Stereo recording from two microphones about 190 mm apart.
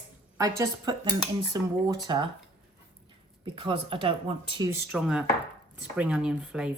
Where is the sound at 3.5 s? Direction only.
25° right (ahead or behind).